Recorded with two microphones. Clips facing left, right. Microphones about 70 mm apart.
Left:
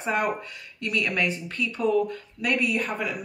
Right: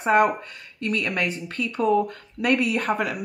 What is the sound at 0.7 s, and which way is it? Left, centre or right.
Speech, right.